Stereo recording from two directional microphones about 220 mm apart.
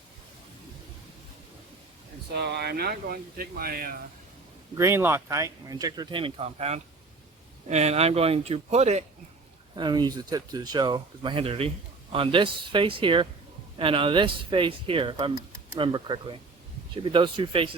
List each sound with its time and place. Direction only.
2.3 s speech: 50° right (ahead or behind)
4.7 s speech: 10° right (ahead or behind); by 9.0 s 30° right (ahead or behind)
9.7 s speech: 20° right (ahead or behind)